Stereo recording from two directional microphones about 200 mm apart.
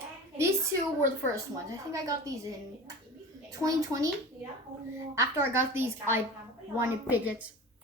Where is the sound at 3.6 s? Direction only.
15° right (ahead or behind).